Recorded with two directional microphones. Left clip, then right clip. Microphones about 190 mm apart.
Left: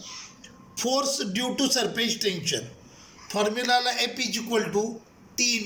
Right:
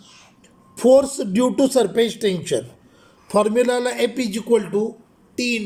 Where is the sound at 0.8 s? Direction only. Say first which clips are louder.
Right 13 dB; 30° right (ahead or behind).